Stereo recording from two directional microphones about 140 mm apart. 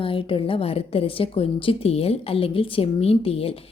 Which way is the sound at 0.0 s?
40° left (ahead or behind).